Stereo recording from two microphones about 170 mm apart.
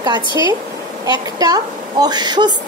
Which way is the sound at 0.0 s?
25° right (ahead or behind).